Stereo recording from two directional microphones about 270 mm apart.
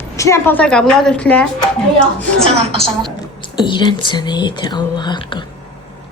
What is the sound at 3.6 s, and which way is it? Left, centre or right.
Speech, centre.